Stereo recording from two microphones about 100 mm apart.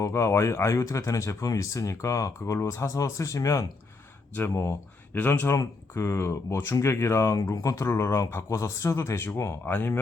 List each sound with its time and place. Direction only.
0.0 s speech: 30° left (ahead or behind)